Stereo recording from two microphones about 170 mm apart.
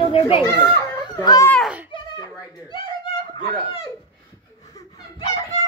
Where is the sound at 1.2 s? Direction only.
20° left (ahead or behind).